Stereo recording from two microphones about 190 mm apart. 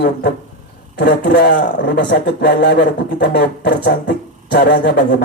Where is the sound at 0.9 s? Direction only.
65° left (ahead or behind).